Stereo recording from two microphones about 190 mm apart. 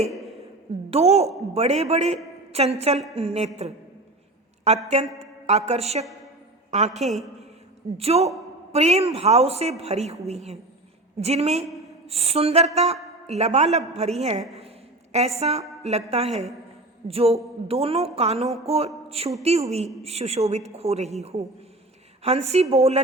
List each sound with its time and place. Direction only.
0.9 s a man's voice: 35° right (ahead or behind)